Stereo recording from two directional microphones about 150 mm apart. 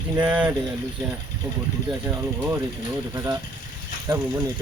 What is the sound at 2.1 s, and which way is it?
Speech, 15° right (ahead or behind).